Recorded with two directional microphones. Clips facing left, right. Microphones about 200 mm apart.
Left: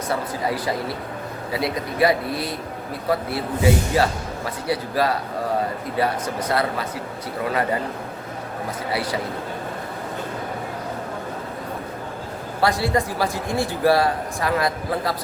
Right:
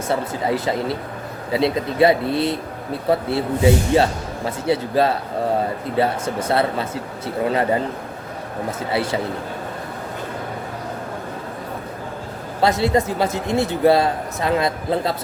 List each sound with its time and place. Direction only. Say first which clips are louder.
0.1 s speech: right 4 dB; 25° right (ahead or behind)
8.9 s speech: right 3 dB; 25° right (ahead or behind)
12.6 s speech: right 3 dB; 20° right (ahead or behind)